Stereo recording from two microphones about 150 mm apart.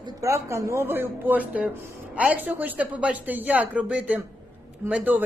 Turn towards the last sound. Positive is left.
turn(degrees=-10)  # may be behind; listen again after turning